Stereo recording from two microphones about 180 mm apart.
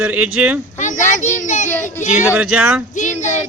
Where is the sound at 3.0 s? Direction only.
40° left (ahead or behind).